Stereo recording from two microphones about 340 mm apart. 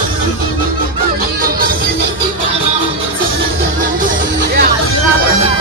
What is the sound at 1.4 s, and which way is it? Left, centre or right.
Music, right.